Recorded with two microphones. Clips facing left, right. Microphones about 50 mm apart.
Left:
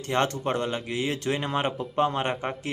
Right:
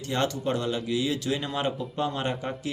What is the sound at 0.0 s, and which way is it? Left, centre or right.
A man's voice, left.